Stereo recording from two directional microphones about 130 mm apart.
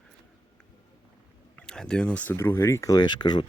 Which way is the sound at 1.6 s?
5° left (ahead or behind).